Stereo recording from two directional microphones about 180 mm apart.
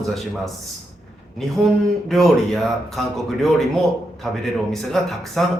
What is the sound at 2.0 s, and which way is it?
Speech, centre (ahead or behind).